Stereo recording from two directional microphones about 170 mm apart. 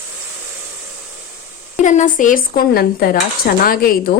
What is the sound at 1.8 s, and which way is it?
Speech, 45° left (ahead or behind).